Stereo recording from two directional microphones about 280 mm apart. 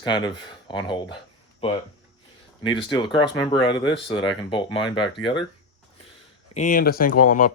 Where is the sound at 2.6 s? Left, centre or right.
Centre.